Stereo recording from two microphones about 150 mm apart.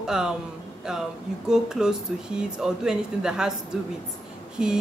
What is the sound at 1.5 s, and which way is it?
Speech, 5° right (ahead or behind).